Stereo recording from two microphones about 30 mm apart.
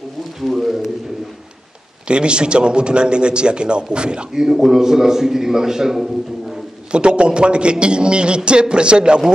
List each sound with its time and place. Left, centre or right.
0.4 s a man's voice: centre
2.0 s a man's voice: right
4.3 s a man's voice: centre
6.9 s a man's voice: right